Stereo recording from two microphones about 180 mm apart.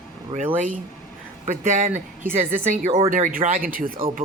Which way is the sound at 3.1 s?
50° right (ahead or behind).